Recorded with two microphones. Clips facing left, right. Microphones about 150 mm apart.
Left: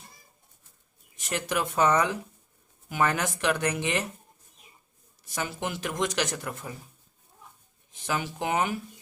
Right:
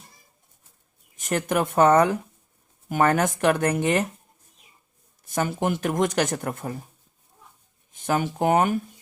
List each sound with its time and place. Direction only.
1.1 s speech: 50° right (ahead or behind)
5.2 s speech: 50° right (ahead or behind)
7.9 s speech: 50° right (ahead or behind)